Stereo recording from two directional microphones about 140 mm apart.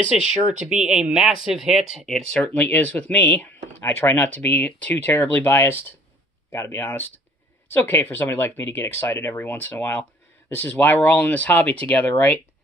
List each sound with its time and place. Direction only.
0.1 s speech: 5° right (ahead or behind)
2.4 s speech: 10° left (ahead or behind)